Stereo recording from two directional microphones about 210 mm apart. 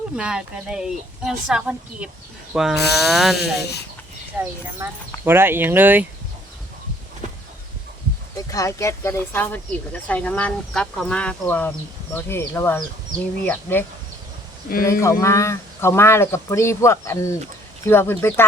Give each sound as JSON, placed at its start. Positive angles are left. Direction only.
{"t": 0.2, "sound": "a woman's voice", "side_deg": -5}
{"t": 3.6, "sound": "speech", "side_deg": 50}
{"t": 4.4, "sound": "speech", "side_deg": -10}
{"t": 8.4, "sound": "speech", "side_deg": 15}
{"t": 14.8, "sound": "speech", "side_deg": 15}